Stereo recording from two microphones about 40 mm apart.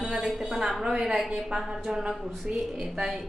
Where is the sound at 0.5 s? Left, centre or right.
Centre.